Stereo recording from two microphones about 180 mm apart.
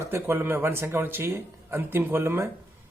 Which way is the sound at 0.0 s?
10° right (ahead or behind).